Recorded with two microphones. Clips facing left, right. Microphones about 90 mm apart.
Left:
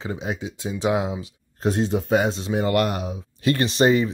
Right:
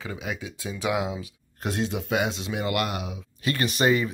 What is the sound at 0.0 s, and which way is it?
Speech, 30° left (ahead or behind).